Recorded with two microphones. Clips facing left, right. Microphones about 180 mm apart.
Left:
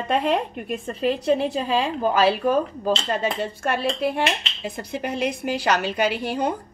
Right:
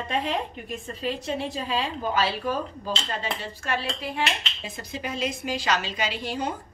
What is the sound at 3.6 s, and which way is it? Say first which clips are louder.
A woman's voice: left 7 dB; 55° left (ahead or behind).